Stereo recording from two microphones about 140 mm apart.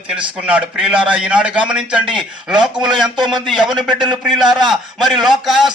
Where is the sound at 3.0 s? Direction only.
30° right (ahead or behind).